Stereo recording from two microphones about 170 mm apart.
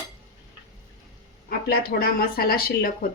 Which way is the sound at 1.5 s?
65° left (ahead or behind).